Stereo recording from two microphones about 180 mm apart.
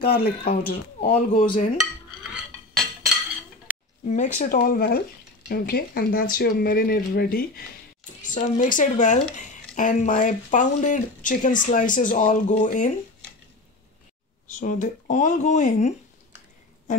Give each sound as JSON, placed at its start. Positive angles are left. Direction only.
{"t": 0.2, "sound": "speech", "side_deg": 55}
{"t": 2.3, "sound": "cutlery", "side_deg": 0}
{"t": 4.1, "sound": "speech", "side_deg": 40}
{"t": 8.2, "sound": "speech", "side_deg": 45}
{"t": 14.6, "sound": "speech", "side_deg": 45}